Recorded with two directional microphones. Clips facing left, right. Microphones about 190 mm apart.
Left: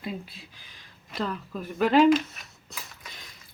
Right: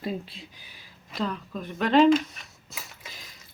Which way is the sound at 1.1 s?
Centre (ahead or behind).